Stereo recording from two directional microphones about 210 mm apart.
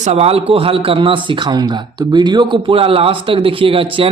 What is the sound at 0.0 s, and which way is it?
A man's voice, 30° right (ahead or behind).